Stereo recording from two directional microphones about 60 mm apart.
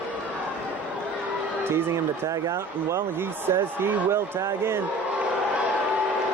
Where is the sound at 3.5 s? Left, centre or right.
Right.